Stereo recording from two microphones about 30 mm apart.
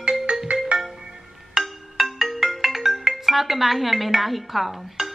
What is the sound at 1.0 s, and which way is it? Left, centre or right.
Music, right.